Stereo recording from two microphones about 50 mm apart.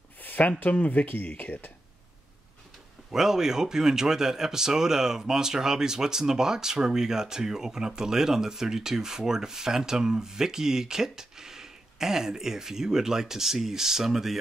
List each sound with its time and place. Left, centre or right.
0.2 s speech: left
3.1 s speech: centre